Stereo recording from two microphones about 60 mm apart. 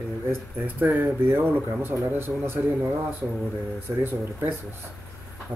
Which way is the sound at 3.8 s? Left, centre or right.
Right.